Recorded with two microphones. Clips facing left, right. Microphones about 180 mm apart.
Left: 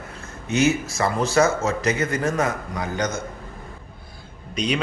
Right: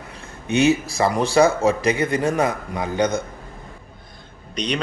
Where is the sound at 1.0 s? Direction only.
15° right (ahead or behind).